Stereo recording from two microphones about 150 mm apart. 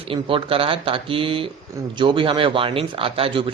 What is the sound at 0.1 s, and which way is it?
Speech, 35° right (ahead or behind).